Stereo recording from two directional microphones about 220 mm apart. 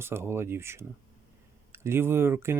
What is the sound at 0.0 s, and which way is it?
Speech, 10° right (ahead or behind).